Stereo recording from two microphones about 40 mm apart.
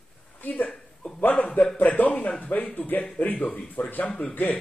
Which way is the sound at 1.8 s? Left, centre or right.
Left.